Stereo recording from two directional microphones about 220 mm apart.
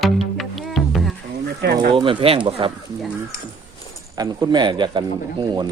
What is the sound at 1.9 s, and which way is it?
Speech, 20° right (ahead or behind).